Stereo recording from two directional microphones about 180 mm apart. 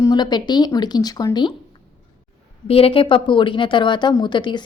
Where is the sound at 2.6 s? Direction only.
30° left (ahead or behind).